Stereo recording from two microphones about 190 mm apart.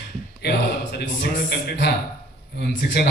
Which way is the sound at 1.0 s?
65° left (ahead or behind).